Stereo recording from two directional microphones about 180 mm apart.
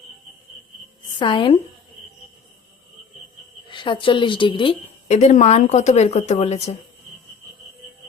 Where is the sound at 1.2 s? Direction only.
30° left (ahead or behind).